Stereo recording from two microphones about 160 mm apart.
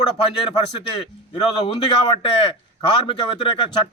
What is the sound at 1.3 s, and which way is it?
A man's voice, 35° left (ahead or behind).